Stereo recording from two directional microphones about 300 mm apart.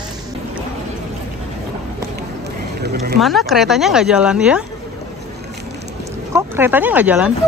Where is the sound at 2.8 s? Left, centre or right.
Right.